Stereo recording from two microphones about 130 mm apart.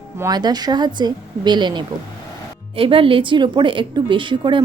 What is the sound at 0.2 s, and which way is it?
Speech, 30° right (ahead or behind).